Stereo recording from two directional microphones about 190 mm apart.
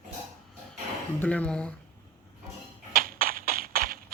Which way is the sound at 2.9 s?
50° right (ahead or behind).